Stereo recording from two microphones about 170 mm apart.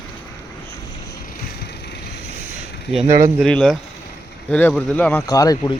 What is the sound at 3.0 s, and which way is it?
Speech, 50° right (ahead or behind).